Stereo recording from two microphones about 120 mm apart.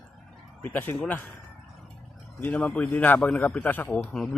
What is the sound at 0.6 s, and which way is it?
Speech, 15° left (ahead or behind).